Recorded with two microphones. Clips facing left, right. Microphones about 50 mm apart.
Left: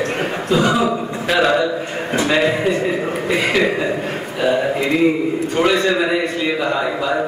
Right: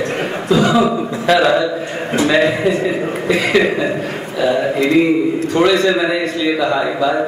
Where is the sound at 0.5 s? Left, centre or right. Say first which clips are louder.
Right 3 dB; centre.